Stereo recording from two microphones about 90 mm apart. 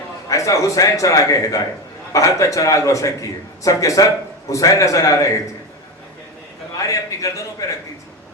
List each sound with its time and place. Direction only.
0.3 s a man's voice: 35° left (ahead or behind)
6.8 s a man's voice: 35° left (ahead or behind)